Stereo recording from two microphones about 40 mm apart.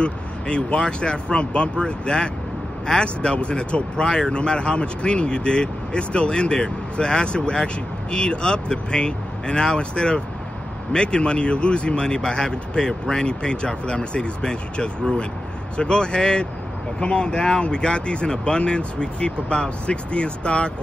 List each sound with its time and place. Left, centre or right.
0.0 s speech: left